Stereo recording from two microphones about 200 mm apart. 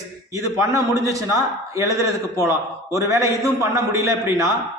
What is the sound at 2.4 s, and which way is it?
A man's voice, 15° right (ahead or behind).